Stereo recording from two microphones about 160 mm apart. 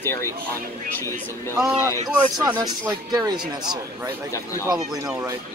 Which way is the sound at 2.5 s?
25° right (ahead or behind).